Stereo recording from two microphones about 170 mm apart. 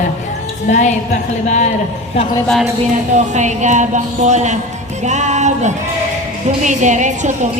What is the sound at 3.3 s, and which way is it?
A woman's voice, 45° right (ahead or behind).